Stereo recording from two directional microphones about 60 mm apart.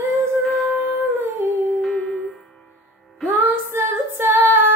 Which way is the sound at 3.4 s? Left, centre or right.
Right.